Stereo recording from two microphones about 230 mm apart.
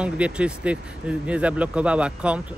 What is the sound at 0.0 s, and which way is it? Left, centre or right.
Speech, centre.